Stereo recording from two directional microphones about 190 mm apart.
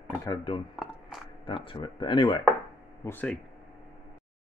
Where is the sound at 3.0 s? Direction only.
10° left (ahead or behind).